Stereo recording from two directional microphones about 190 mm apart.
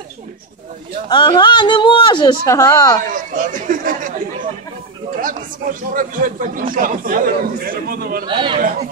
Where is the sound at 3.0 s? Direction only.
45° right (ahead or behind).